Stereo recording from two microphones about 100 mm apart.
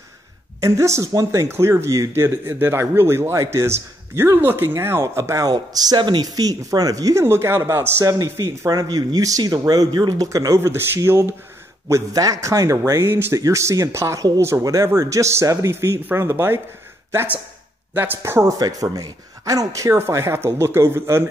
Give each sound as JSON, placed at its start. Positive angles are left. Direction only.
{"t": 0.6, "sound": "speech", "side_deg": -30}
{"t": 8.0, "sound": "speech", "side_deg": -35}
{"t": 18.6, "sound": "speech", "side_deg": -40}